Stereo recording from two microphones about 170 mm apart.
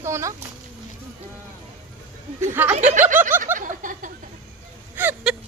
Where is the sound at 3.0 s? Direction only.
50° right (ahead or behind).